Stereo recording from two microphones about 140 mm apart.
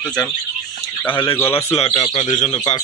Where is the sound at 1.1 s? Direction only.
35° left (ahead or behind).